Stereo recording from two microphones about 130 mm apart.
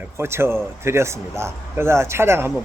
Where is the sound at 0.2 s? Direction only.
20° right (ahead or behind).